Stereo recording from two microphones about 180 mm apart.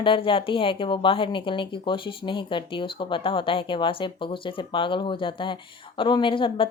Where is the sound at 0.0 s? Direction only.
30° left (ahead or behind).